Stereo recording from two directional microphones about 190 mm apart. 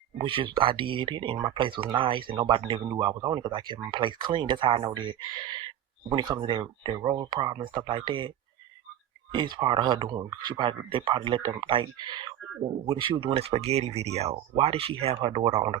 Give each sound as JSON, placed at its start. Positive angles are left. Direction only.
{"t": 0.2, "sound": "speech", "side_deg": -30}
{"t": 9.3, "sound": "speech", "side_deg": -25}